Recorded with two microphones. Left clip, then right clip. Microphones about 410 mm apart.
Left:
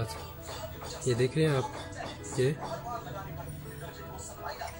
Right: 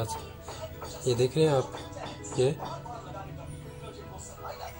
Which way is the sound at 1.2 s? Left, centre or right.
Centre.